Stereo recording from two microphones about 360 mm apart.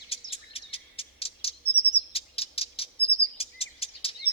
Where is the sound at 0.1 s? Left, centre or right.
Centre.